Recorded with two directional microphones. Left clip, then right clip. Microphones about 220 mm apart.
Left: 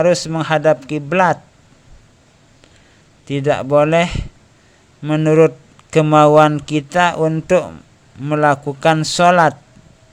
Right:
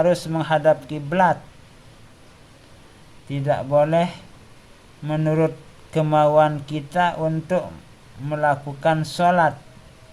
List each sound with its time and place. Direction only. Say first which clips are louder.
0.0 s speech: left 5 dB; 30° left (ahead or behind)
3.2 s speech: left 6 dB; 35° left (ahead or behind)